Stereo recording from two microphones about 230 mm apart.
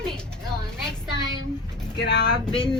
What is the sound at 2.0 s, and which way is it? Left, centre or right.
Speech, left.